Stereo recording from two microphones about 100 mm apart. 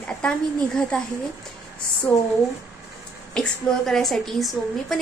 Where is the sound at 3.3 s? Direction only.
5° left (ahead or behind).